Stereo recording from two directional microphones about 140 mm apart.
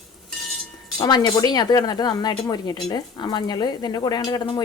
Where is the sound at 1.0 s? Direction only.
30° left (ahead or behind).